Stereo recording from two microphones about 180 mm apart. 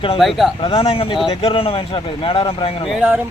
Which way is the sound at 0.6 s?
30° left (ahead or behind).